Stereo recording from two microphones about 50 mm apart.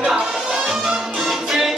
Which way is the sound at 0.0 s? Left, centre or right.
Centre.